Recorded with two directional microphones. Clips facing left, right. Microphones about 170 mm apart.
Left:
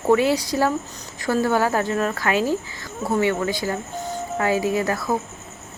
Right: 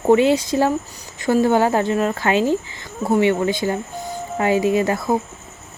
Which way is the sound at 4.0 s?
10° right (ahead or behind).